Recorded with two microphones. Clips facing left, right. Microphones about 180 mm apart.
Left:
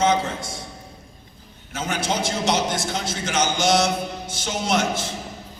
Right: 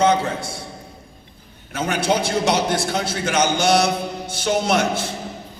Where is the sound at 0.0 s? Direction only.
60° right (ahead or behind).